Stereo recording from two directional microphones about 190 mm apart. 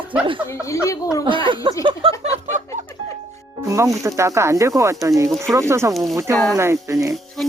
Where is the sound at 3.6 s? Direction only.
15° right (ahead or behind).